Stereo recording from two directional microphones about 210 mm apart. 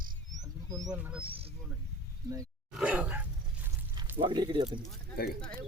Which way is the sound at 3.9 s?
20° right (ahead or behind).